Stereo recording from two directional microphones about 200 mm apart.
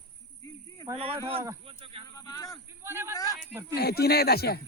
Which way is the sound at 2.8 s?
10° right (ahead or behind).